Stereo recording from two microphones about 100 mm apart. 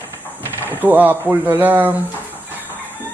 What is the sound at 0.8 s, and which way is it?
A man's voice, 20° right (ahead or behind).